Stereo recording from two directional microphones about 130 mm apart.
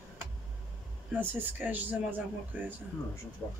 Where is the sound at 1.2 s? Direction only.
15° right (ahead or behind).